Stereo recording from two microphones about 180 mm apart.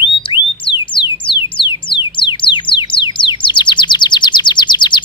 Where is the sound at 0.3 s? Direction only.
25° left (ahead or behind).